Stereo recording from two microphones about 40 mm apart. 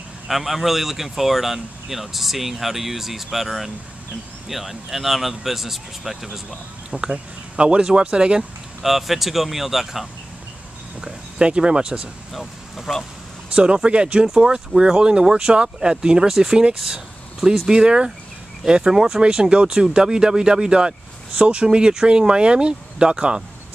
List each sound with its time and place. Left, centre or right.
0.3 s speech: centre
6.9 s speech: right
8.8 s speech: centre
11.0 s speech: centre
12.3 s a sound: centre
13.8 s speech: right
14.2 s speech: centre
21.6 s speech: centre